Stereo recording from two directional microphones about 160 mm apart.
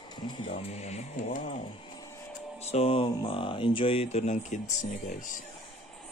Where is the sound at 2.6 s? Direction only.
40° left (ahead or behind).